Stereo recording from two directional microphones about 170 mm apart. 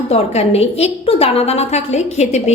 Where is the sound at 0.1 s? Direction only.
35° left (ahead or behind).